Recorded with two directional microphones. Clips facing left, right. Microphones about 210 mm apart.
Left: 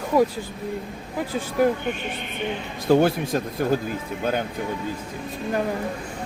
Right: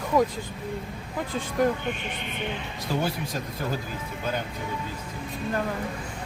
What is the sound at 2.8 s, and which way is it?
Speech, 55° left (ahead or behind).